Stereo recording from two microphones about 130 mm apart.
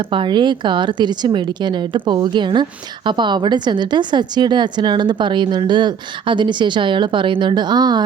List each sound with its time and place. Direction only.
0.1 s a woman's voice: 40° right (ahead or behind)